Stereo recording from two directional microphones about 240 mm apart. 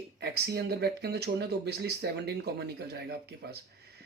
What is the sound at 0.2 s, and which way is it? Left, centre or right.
Speech, right.